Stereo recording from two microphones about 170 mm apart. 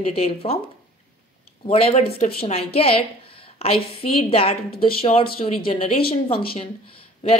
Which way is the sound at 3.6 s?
35° left (ahead or behind).